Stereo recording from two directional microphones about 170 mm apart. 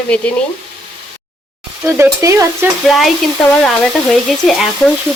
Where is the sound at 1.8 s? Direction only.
15° right (ahead or behind).